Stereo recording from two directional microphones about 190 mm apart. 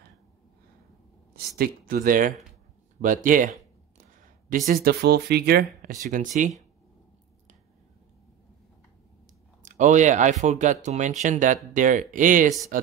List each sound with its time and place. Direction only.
1.6 s speech: 50° right (ahead or behind)
4.6 s speech: 55° right (ahead or behind)
5.9 s speech: 45° right (ahead or behind)
9.7 s speech: 40° right (ahead or behind)